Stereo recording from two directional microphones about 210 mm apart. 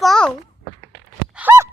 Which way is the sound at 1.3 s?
10° right (ahead or behind).